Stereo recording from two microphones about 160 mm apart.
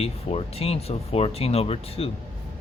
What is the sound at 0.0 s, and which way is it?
Speech, 40° left (ahead or behind).